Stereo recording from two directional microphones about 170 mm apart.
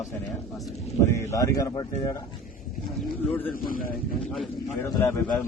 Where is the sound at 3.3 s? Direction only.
10° left (ahead or behind).